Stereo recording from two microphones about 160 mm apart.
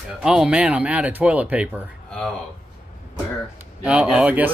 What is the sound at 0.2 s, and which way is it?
Speech, 5° right (ahead or behind).